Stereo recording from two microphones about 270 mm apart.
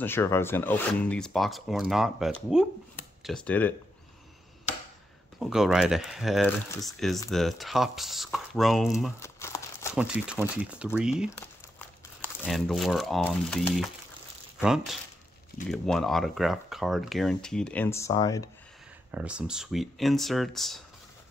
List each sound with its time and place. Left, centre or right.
0.0 s speech: centre
5.4 s speech: centre
9.2 s crumpling: centre
9.9 s speech: centre
11.3 s speech: centre
19.1 s speech: centre